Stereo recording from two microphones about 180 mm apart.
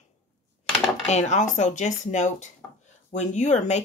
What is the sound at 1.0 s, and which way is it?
Speech, 40° left (ahead or behind).